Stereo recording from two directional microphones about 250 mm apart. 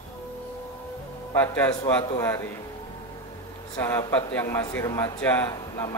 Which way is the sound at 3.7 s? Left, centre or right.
Centre.